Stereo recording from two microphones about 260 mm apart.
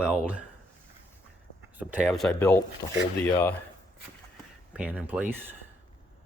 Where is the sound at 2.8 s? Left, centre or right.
Left.